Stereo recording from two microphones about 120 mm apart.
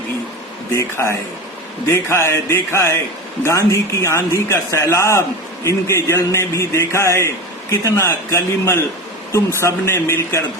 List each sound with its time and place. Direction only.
0.7 s a man's voice: 25° left (ahead or behind)